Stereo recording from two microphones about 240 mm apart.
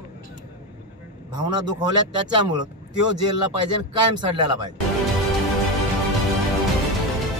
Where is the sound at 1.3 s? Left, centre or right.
Centre.